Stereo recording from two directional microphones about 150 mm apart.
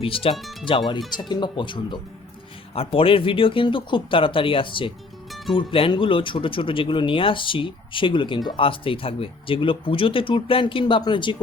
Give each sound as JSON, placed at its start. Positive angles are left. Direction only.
{"t": 0.0, "sound": "speech", "side_deg": 35}